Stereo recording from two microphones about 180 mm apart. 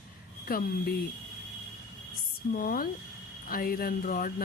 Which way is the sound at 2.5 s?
55° left (ahead or behind).